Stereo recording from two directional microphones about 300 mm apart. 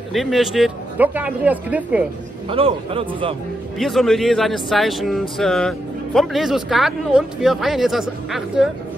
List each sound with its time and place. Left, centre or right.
0.1 s speech: centre
2.5 s a man's voice: centre
3.7 s speech: centre